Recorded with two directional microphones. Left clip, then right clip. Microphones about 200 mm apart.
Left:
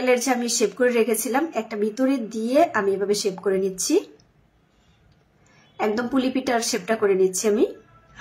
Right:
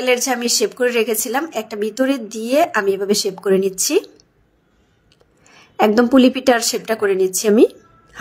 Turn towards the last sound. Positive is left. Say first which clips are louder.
# right 6 dB
turn(degrees=-45)  # may be behind; listen again after turning